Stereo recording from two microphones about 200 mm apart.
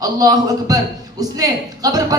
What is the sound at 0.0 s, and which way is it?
Speech, 20° right (ahead or behind).